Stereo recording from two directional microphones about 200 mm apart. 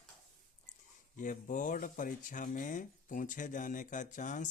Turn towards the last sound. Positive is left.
turn(degrees=40)  # may be behind; listen again after turning